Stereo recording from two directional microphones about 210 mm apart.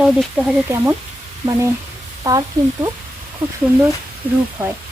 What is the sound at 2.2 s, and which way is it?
Speech, 20° right (ahead or behind).